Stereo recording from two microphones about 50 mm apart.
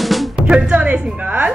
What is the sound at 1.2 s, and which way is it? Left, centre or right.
Speech, right.